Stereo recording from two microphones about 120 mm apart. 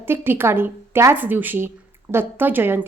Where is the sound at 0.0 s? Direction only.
20° right (ahead or behind).